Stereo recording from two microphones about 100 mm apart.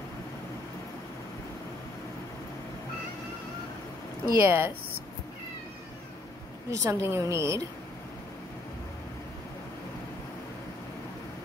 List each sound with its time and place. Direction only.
4.4 s a woman's voice: 20° right (ahead or behind)
6.7 s a woman's voice: 30° right (ahead or behind)